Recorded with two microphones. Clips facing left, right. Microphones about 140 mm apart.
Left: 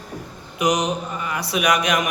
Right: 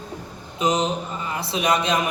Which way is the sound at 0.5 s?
25° right (ahead or behind).